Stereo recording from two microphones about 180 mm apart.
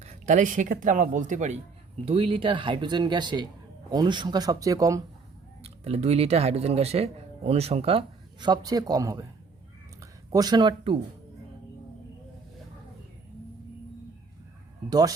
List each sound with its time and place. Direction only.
0.0 s speech: 40° right (ahead or behind); by 5.0 s 20° right (ahead or behind)
5.6 s speech: 35° right (ahead or behind)
14.8 s speech: 20° right (ahead or behind)